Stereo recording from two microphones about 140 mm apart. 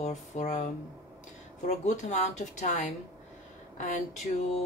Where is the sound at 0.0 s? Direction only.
55° left (ahead or behind).